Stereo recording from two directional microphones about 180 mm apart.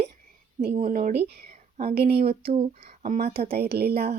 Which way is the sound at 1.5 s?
35° right (ahead or behind).